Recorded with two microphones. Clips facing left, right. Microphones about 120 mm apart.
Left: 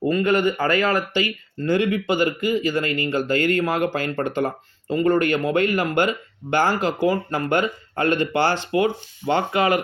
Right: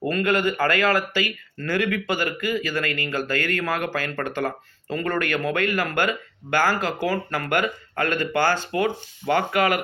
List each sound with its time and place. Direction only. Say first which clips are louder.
0.1 s speech: left 2 dB; 15° left (ahead or behind)